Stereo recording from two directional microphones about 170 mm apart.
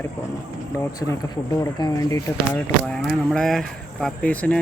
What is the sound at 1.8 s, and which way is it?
Speech, 20° left (ahead or behind).